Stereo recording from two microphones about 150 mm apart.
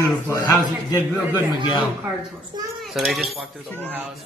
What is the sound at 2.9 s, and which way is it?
Speech, centre (ahead or behind).